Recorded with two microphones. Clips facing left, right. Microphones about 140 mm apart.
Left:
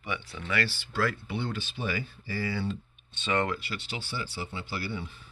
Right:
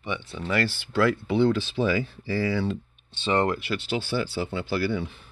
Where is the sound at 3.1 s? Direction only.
30° right (ahead or behind).